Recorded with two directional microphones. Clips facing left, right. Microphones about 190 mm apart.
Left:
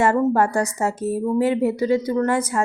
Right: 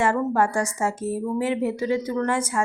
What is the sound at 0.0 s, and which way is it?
A woman's voice, 40° left (ahead or behind).